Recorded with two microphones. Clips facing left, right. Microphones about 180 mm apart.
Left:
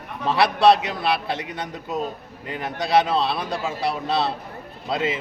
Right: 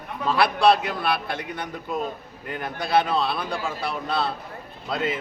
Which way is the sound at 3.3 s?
25° left (ahead or behind).